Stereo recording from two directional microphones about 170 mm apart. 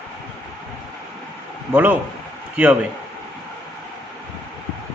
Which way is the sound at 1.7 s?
10° right (ahead or behind).